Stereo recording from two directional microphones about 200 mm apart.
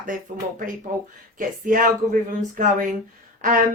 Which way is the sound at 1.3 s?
45° right (ahead or behind).